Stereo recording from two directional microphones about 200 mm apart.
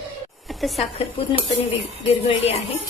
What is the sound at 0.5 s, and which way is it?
Speech, centre (ahead or behind).